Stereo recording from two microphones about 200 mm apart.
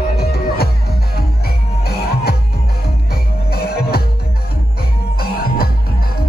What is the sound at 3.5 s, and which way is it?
Music, 50° left (ahead or behind).